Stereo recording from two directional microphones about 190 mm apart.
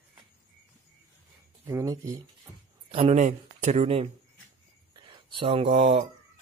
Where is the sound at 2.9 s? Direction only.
35° right (ahead or behind).